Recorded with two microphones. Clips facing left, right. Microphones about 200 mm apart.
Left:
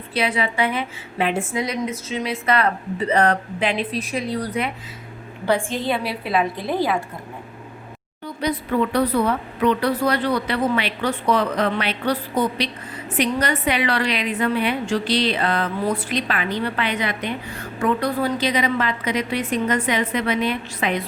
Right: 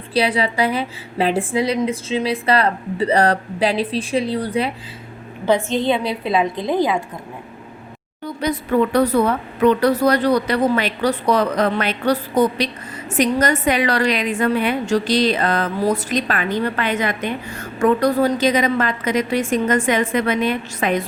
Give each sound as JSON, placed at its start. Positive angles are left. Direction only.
{"t": 0.1, "sound": "a woman's voice", "side_deg": -35}
{"t": 5.7, "sound": "a woman's voice", "side_deg": -20}
{"t": 8.2, "sound": "a woman's voice", "side_deg": -45}